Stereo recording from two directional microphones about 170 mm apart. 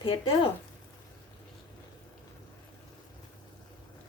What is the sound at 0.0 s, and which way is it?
Speech, 30° left (ahead or behind).